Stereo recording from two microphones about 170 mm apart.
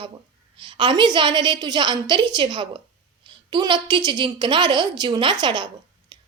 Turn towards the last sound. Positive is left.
turn(degrees=-25)  # may be behind; listen again after turning